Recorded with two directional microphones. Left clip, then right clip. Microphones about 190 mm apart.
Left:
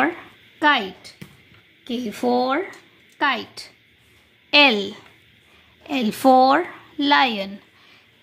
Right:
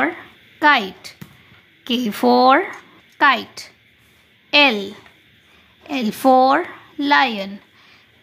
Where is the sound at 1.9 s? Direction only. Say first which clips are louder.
Right 6 dB; 25° right (ahead or behind).